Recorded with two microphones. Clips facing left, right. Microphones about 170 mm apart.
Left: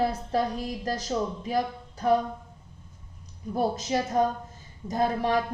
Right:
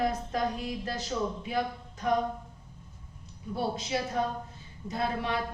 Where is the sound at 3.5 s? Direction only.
45° left (ahead or behind).